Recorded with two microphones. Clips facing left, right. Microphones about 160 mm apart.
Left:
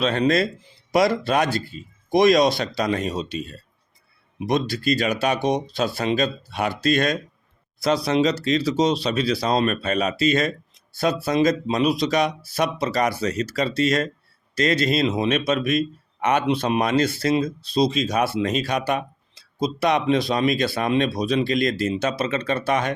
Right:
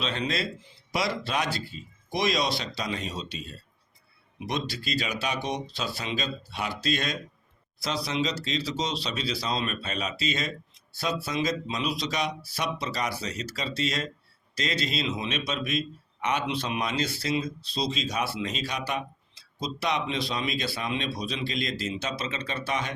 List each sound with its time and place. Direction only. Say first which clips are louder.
0.0 s speech: left 10 dB; 50° left (ahead or behind)